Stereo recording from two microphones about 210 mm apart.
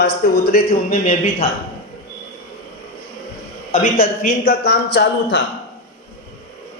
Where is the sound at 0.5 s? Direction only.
35° left (ahead or behind).